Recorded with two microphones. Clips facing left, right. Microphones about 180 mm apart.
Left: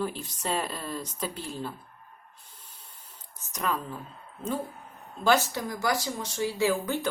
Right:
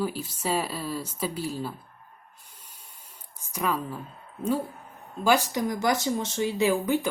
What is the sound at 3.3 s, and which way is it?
Speech, 10° right (ahead or behind).